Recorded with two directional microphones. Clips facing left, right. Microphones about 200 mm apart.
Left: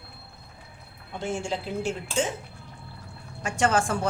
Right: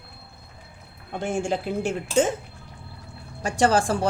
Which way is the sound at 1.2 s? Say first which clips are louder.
Right 4 dB; 55° right (ahead or behind).